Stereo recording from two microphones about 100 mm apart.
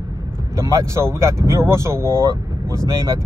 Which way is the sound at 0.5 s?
30° right (ahead or behind).